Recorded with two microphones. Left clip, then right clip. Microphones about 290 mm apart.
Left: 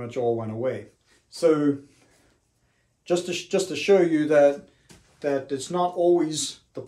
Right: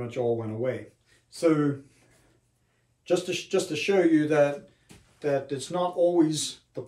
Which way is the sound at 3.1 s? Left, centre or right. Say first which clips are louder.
Left 1 dB; centre.